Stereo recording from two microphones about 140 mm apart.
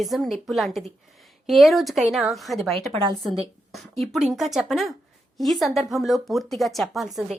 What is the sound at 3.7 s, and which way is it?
Speech, centre (ahead or behind).